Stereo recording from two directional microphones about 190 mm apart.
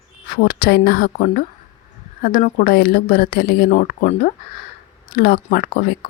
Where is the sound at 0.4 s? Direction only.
50° left (ahead or behind).